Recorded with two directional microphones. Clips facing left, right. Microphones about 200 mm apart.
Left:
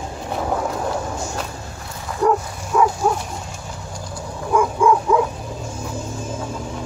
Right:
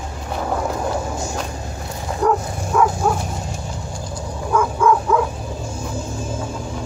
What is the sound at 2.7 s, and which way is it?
Dog, 5° left (ahead or behind).